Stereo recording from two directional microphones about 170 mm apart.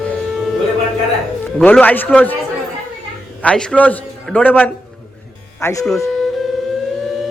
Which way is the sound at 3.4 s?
5° left (ahead or behind).